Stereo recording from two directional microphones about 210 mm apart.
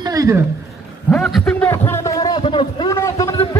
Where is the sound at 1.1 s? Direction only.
Centre (ahead or behind); by 2.9 s 25° left (ahead or behind).